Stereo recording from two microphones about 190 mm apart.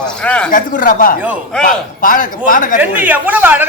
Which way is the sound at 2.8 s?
10° right (ahead or behind).